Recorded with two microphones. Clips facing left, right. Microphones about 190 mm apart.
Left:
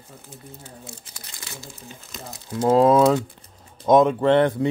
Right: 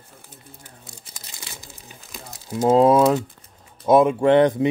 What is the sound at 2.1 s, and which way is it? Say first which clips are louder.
Crumpling: right 1 dB; 10° right (ahead or behind).